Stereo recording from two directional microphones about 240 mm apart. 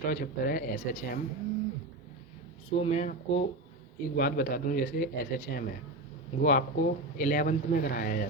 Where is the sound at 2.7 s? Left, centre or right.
Left.